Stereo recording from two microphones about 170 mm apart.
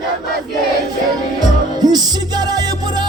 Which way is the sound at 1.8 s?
25° right (ahead or behind).